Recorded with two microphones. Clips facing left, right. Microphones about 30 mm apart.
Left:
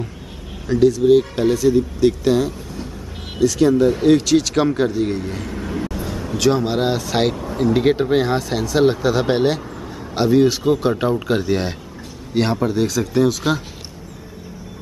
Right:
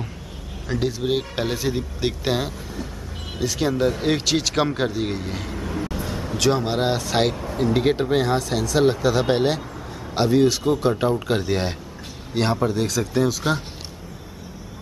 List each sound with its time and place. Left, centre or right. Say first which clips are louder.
0.7 s speech: left 10 dB; centre
3.3 s a man's voice: left 8 dB; centre